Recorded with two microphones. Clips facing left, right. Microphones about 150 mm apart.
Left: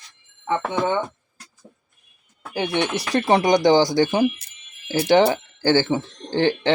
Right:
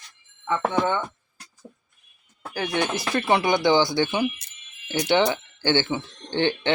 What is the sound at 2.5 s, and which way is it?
Speech, 30° left (ahead or behind).